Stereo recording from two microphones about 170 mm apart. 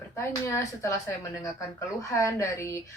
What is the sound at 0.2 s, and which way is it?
Speech, 15° left (ahead or behind).